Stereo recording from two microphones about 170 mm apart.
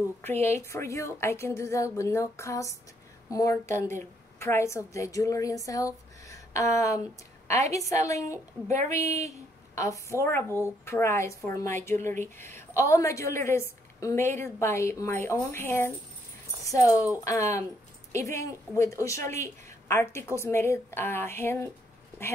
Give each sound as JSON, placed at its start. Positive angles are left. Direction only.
{"t": 0.2, "sound": "a woman's voice", "side_deg": 15}
{"t": 9.8, "sound": "a woman's voice", "side_deg": 20}